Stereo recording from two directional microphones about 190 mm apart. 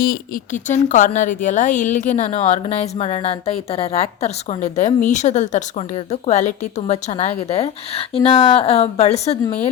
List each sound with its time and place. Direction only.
0.0 s a woman's voice: 45° left (ahead or behind)